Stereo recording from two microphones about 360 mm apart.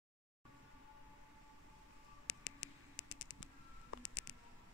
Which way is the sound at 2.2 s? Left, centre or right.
Left.